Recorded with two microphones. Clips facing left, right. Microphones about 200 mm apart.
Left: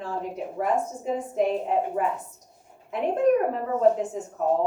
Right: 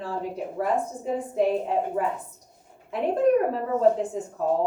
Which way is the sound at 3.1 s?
35° right (ahead or behind).